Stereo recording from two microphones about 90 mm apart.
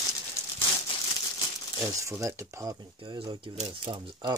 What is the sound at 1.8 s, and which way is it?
Speech, 35° right (ahead or behind).